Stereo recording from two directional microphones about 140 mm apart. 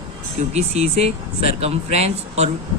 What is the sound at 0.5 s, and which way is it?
Speech, 50° right (ahead or behind).